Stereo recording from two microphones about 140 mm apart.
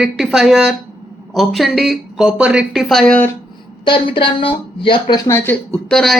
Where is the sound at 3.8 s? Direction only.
35° left (ahead or behind).